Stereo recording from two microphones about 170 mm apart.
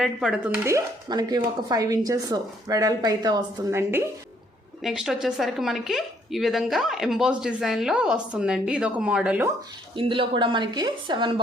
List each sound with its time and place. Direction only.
0.0 s a woman's voice: 5° right (ahead or behind)
4.8 s a woman's voice: 5° right (ahead or behind)
9.9 s a woman's voice: 30° right (ahead or behind)